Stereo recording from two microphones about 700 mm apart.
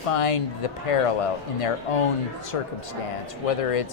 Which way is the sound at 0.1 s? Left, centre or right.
Left.